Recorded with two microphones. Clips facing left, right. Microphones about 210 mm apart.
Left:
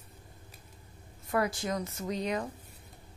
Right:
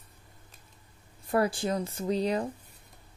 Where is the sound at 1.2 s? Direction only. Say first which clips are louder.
Right 4 dB; 30° right (ahead or behind).